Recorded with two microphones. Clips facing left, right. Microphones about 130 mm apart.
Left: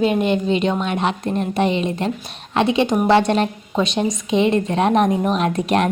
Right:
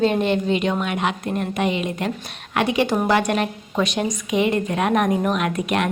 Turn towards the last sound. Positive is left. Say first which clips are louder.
# left 4 dB
turn(degrees=35)  # may be behind; listen again after turning